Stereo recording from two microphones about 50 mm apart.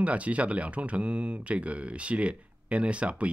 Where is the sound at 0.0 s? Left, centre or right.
Right.